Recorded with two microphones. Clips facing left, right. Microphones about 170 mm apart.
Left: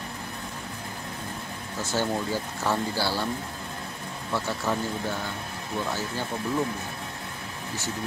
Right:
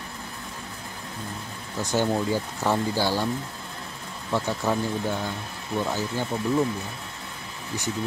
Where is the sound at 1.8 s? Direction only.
15° right (ahead or behind).